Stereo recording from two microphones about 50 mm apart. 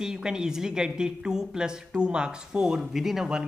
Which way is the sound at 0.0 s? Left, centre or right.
Centre.